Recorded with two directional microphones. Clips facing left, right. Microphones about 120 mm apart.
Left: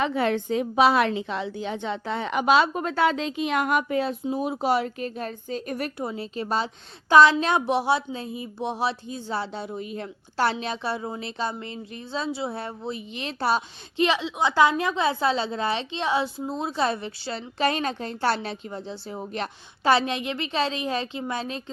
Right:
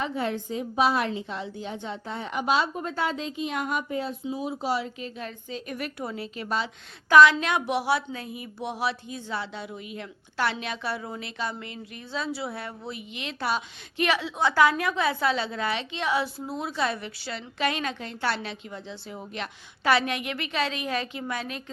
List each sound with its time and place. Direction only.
0.0 s a woman's voice: 80° left
4.2 s speech: 55° left (ahead or behind); by 5.9 s 40° left (ahead or behind)
6.0 s a woman's voice: 25° left (ahead or behind)